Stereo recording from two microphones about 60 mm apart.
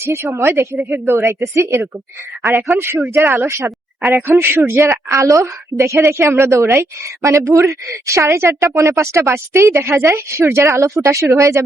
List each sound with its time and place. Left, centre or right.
0.0 s a woman's voice: right
0.8 s a woman's voice: right
4.1 s a man's voice: right
5.0 s a woman's voice: right